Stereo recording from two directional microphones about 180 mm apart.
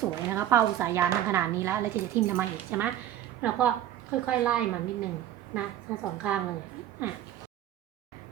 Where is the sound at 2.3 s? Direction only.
10° right (ahead or behind).